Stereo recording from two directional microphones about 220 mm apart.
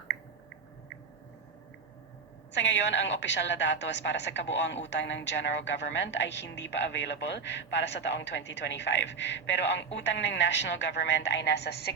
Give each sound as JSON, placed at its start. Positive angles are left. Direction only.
{"t": 2.5, "sound": "a woman's voice", "side_deg": 55}